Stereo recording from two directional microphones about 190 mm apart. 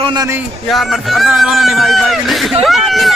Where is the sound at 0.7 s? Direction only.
Centre (ahead or behind).